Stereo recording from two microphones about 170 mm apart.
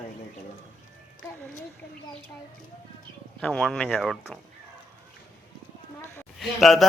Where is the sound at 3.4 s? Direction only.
5° left (ahead or behind).